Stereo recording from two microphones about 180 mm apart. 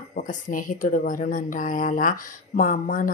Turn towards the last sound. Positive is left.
turn(degrees=45)  # may be behind; listen again after turning